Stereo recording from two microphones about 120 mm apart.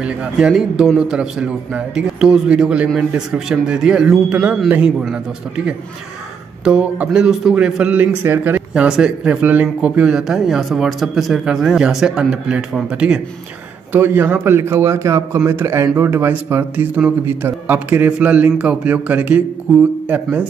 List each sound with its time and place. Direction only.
0.0 s speech: 10° right (ahead or behind)
6.6 s speech: 10° right (ahead or behind)
13.9 s a man's voice: 20° right (ahead or behind)